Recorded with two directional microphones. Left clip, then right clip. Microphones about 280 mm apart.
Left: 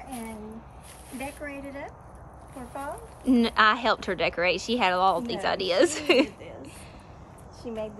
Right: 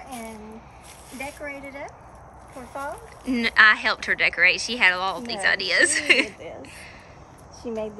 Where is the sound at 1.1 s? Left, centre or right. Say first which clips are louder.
Right 3 dB; centre.